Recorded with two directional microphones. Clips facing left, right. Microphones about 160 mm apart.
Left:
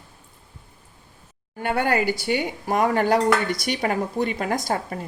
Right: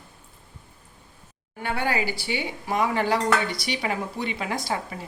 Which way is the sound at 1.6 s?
50° left (ahead or behind).